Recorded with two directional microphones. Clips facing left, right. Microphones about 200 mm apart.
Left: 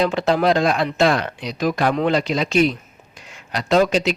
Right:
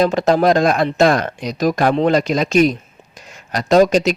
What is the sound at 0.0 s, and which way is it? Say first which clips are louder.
Speech: right 4 dB; 45° right (ahead or behind).